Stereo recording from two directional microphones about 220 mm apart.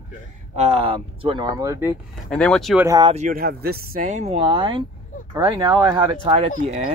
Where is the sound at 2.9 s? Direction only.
20° right (ahead or behind).